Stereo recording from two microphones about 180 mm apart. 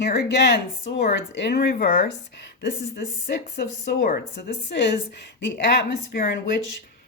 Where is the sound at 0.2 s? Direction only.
70° left (ahead or behind).